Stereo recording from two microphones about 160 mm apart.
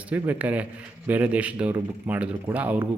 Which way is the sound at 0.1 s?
10° right (ahead or behind).